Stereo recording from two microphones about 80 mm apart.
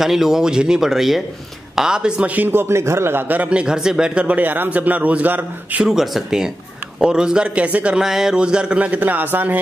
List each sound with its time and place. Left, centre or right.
0.0 s a man's voice: centre; by 5.9 s right
5.9 s a man's voice: centre; by 9.6 s right